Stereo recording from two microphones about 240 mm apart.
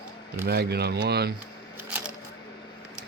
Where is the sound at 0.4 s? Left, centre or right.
Right.